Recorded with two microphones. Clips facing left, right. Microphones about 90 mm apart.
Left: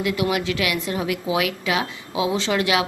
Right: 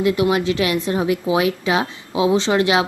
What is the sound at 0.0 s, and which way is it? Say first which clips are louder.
Speech: right 5 dB; 30° right (ahead or behind).